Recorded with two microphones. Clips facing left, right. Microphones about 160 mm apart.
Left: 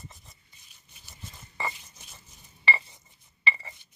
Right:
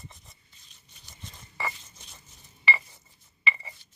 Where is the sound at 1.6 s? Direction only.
20° left (ahead or behind).